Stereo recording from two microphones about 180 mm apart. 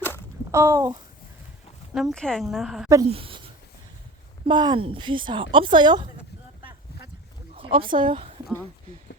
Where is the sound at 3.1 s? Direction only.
30° right (ahead or behind).